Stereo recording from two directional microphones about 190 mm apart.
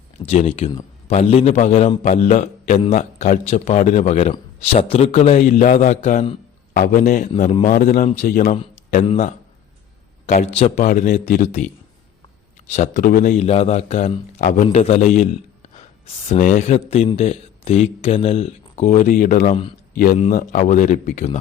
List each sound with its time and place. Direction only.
0.2 s a man's voice: 35° left (ahead or behind)
12.7 s a man's voice: 40° left (ahead or behind)
16.3 s a man's voice: 40° left (ahead or behind)
20.1 s a man's voice: 40° left (ahead or behind)